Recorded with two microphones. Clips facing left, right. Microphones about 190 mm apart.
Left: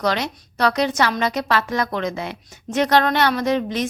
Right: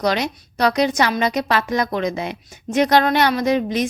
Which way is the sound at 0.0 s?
15° right (ahead or behind).